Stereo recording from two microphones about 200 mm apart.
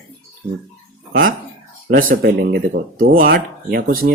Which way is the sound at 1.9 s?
45° right (ahead or behind).